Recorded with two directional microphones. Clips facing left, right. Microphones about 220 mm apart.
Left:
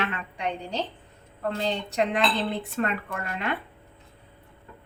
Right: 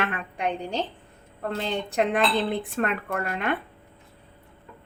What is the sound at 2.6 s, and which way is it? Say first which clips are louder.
Speech: right 1 dB; 55° right (ahead or behind).